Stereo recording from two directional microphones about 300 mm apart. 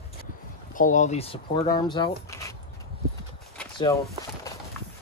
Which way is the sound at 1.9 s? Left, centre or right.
Centre.